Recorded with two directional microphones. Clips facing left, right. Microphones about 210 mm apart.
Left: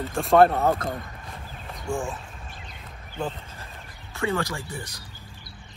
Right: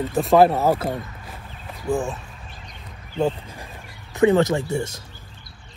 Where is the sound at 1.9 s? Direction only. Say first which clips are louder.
Right 6 dB; centre (ahead or behind).